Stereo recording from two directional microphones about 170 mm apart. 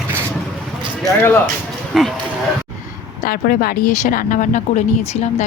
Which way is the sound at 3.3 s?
60° left (ahead or behind).